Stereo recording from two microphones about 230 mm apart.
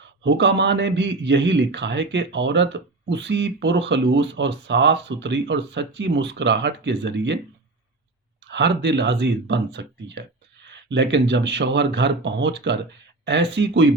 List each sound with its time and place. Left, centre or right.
0.2 s a man's voice: right
8.4 s a man's voice: right